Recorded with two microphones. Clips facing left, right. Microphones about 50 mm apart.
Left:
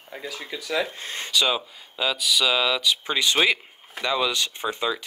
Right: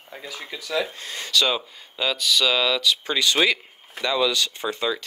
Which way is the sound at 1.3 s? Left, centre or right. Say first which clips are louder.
Right 1 dB; centre.